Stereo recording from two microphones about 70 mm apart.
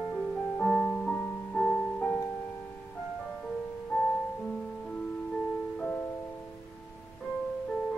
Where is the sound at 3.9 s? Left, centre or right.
Centre.